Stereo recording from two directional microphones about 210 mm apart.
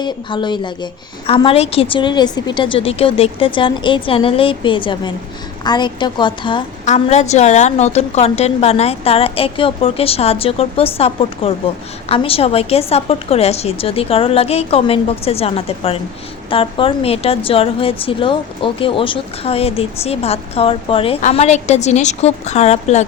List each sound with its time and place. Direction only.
0.0 s speech: 20° left (ahead or behind)
6.8 s speech: 35° left (ahead or behind)